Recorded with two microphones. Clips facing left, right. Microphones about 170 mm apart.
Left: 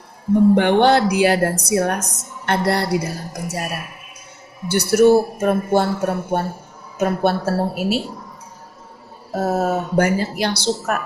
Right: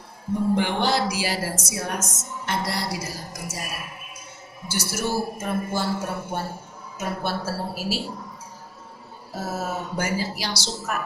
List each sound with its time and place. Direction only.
0.5 s speech: 65° left (ahead or behind)
9.3 s speech: 60° left (ahead or behind)